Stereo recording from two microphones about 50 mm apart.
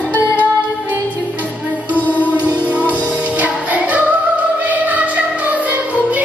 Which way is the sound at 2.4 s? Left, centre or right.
Right.